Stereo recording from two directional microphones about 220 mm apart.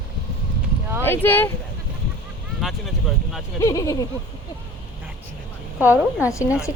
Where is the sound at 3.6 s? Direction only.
15° left (ahead or behind).